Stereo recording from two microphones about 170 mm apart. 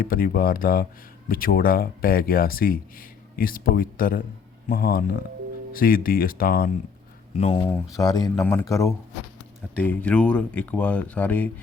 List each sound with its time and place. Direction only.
0.0 s speech: 60° left (ahead or behind)
7.3 s speech: 40° left (ahead or behind)
7.9 s speech: 20° left (ahead or behind)